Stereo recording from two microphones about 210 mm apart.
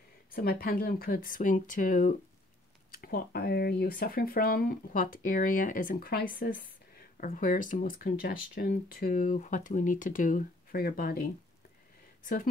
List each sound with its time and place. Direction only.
0.3 s speech: 45° left (ahead or behind)